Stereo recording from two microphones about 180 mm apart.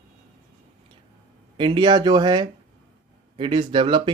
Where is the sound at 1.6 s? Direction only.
25° right (ahead or behind).